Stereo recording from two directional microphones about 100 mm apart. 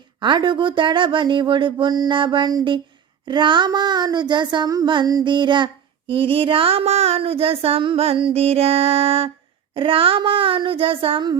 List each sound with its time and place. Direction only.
0.2 s a sound: 50° right (ahead or behind); by 8.2 s 80° right
8.3 s music: 80° right
9.7 s speech: 65° right (ahead or behind)